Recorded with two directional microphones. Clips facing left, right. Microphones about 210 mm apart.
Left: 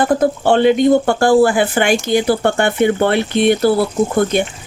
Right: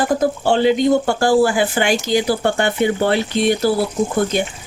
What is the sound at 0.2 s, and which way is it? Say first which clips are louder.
Speech: left 3 dB; 55° left (ahead or behind).